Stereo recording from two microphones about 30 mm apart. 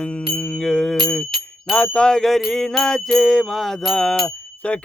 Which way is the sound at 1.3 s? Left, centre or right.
Centre.